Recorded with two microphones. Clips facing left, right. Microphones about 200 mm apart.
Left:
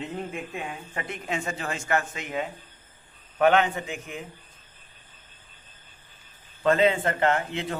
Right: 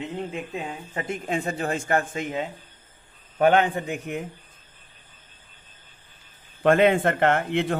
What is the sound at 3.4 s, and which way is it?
Speech, 35° right (ahead or behind).